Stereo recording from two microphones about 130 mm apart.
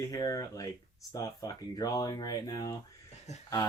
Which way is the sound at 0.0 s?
30° left (ahead or behind).